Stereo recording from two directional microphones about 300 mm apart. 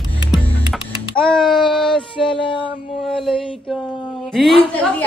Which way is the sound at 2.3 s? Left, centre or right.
Centre.